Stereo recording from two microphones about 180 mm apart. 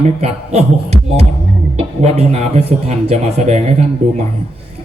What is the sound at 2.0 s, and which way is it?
A man's voice, 35° right (ahead or behind).